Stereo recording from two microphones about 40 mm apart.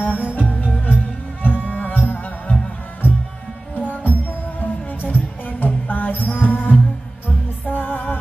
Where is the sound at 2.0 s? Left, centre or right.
Left.